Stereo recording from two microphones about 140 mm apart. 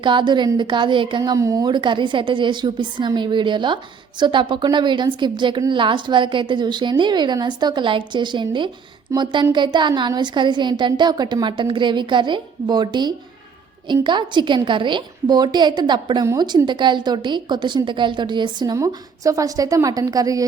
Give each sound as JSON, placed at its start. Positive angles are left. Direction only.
{"t": 0.0, "sound": "a woman's voice", "side_deg": -35}